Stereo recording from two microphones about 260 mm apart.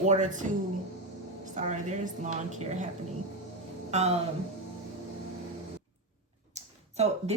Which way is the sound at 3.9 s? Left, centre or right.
Right.